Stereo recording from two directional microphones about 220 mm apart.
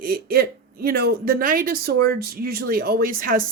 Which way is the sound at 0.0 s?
40° right (ahead or behind).